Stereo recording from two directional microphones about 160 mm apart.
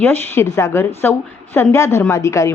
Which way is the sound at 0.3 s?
15° left (ahead or behind).